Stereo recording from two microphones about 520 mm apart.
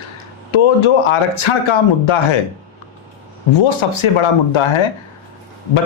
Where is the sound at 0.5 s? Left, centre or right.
Left.